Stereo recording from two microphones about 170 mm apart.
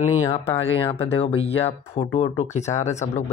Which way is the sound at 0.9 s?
35° left (ahead or behind).